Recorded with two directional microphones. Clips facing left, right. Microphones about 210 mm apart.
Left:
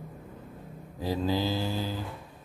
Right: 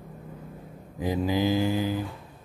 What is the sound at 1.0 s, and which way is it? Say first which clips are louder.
Mantra: right 3 dB; 15° right (ahead or behind).